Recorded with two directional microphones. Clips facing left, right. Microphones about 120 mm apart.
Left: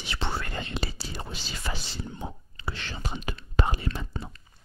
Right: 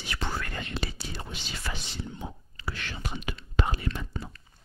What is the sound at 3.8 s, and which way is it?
Whispering, 30° left (ahead or behind).